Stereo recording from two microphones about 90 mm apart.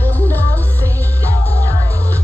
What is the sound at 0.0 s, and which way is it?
Music, 20° left (ahead or behind).